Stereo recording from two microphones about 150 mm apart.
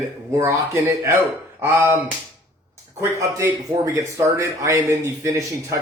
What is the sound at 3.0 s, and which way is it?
Speech, 20° right (ahead or behind).